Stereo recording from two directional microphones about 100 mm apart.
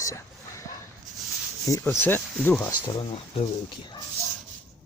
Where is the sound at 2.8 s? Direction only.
50° left (ahead or behind).